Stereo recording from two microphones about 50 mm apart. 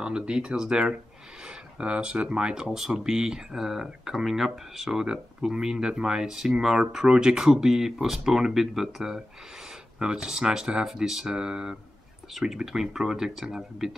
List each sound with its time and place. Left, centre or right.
0.0 s speech: centre